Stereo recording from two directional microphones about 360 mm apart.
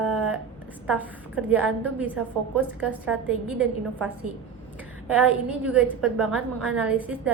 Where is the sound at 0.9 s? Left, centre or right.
Centre.